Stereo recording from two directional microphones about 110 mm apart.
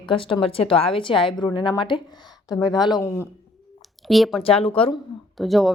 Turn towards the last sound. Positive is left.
turn(degrees=0)  # may be behind; listen again after turning